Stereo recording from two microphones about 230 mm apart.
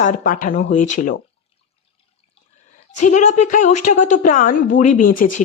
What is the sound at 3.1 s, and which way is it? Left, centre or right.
Speech, left.